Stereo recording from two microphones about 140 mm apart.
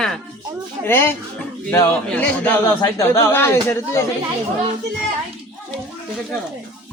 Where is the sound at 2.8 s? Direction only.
25° left (ahead or behind).